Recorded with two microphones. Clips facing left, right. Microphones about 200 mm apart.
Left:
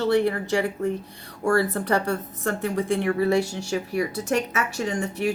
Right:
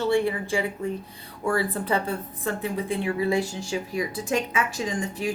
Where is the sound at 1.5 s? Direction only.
70° left (ahead or behind).